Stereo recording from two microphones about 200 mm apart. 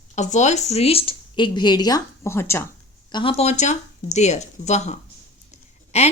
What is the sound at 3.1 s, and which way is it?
Speech, 25° left (ahead or behind).